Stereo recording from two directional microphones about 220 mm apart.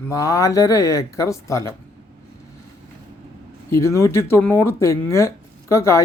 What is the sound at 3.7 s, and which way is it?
Speech, 15° left (ahead or behind).